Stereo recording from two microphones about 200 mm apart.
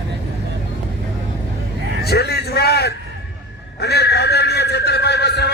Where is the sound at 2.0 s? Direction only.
55° left (ahead or behind).